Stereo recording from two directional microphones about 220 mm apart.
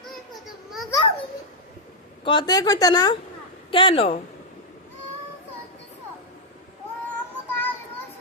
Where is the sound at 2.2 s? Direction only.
20° left (ahead or behind).